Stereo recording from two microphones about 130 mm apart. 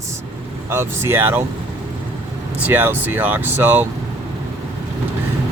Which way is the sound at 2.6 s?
15° right (ahead or behind).